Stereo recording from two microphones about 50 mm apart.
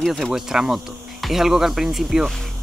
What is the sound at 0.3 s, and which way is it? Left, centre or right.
Speech, centre.